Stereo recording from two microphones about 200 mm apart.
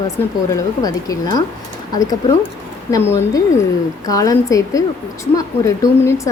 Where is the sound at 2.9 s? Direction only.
15° left (ahead or behind).